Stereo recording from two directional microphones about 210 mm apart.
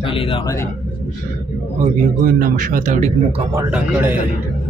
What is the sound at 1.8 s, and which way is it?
A man's voice, 40° right (ahead or behind).